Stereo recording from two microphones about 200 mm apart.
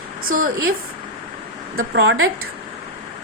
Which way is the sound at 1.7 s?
60° right (ahead or behind).